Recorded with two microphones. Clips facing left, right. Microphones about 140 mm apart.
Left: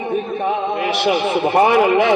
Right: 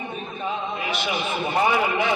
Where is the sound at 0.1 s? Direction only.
70° left (ahead or behind).